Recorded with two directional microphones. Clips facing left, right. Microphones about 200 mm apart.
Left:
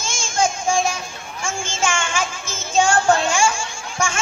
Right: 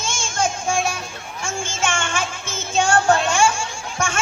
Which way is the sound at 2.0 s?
60° right (ahead or behind).